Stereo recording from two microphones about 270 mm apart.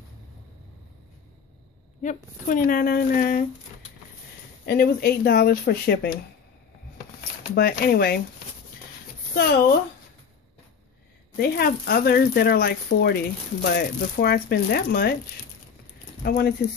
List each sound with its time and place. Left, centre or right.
2.0 s speech: left
4.6 s speech: left
7.5 s speech: left
9.3 s speech: left
11.3 s speech: left
16.2 s speech: left